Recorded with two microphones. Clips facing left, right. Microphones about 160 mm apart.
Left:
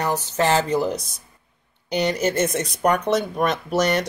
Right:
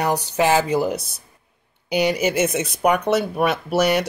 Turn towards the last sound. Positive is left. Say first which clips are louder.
# right 2 dB
turn(degrees=-10)  # may be behind; listen again after turning